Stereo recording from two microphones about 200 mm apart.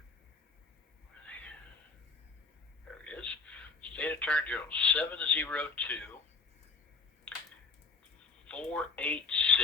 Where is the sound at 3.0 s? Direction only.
5° left (ahead or behind).